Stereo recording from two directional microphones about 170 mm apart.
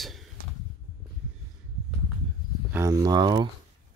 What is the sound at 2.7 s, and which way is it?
Speech, 20° right (ahead or behind).